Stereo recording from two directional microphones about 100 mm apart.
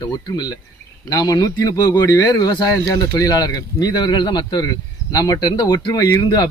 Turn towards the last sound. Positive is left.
turn(degrees=40)  # may be behind; listen again after turning